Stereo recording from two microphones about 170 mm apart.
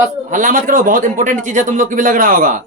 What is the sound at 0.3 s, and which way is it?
A man's voice, 50° right (ahead or behind).